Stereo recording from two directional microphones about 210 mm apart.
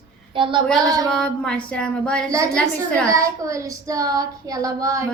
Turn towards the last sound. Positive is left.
turn(degrees=-15)  # may be behind; listen again after turning